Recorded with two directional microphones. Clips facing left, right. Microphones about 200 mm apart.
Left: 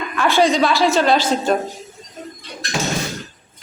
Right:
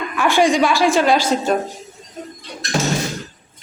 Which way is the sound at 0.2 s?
15° right (ahead or behind).